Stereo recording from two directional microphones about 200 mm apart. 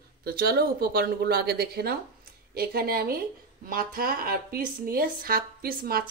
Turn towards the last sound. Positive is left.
turn(degrees=-45)  # may be behind; listen again after turning